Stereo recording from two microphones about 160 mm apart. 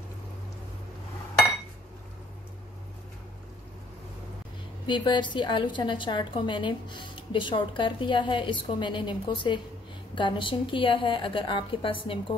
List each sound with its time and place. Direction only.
4.8 s a woman's voice: 30° left (ahead or behind)